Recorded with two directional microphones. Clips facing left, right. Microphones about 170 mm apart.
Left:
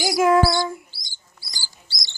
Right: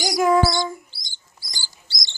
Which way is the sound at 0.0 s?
5° left (ahead or behind).